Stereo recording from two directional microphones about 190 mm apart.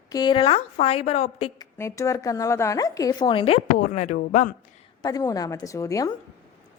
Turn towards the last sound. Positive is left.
turn(degrees=15)  # may be behind; listen again after turning